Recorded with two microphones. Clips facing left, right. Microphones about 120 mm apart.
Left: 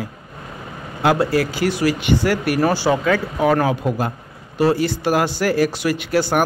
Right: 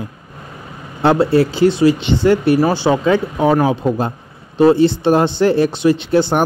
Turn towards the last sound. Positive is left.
turn(degrees=-25)  # may be behind; listen again after turning